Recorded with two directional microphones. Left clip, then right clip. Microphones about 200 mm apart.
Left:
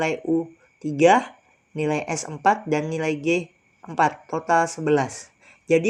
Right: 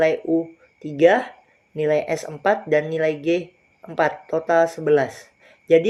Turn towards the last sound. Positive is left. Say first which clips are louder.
# right 4 dB
turn(degrees=30)  # may be behind; listen again after turning